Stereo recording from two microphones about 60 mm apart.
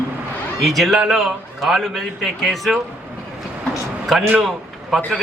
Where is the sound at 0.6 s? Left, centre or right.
Centre.